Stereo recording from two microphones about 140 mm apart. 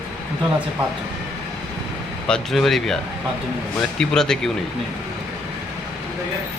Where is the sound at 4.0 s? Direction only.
5° left (ahead or behind).